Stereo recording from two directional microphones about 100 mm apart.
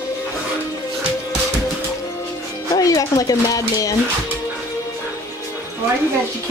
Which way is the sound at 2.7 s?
35° left (ahead or behind).